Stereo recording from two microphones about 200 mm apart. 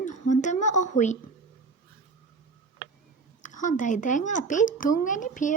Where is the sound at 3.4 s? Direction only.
40° left (ahead or behind).